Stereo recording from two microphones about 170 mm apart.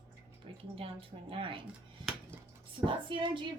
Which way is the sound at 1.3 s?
30° right (ahead or behind).